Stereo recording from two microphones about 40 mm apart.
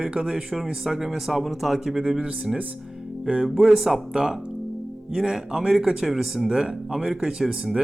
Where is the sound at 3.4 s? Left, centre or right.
Centre.